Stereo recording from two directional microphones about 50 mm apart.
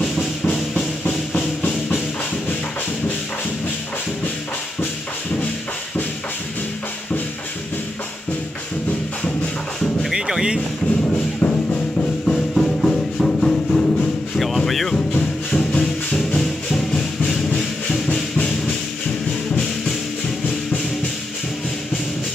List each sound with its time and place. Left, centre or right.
0.5 s music: left
10.1 s music: centre
11.1 s music: left
12.3 s music: centre
14.3 s music: centre
15.1 s music: left
15.8 s music: centre